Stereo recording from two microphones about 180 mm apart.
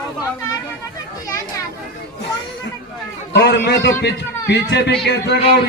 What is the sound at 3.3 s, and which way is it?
A man's voice, 70° left (ahead or behind).